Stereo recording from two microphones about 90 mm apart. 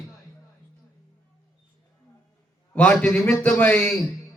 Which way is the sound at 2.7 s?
15° left (ahead or behind).